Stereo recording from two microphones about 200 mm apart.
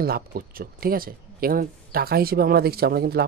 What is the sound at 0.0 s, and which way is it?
Speech, 50° right (ahead or behind).